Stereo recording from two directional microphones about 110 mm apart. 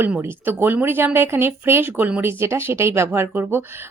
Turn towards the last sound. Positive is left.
turn(degrees=-20)  # may be behind; listen again after turning